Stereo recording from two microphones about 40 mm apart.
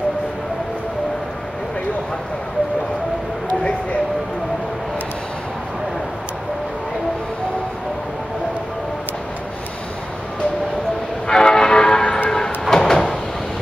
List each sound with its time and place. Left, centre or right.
11.2 s change ringing: centre
12.3 s vehicle: centre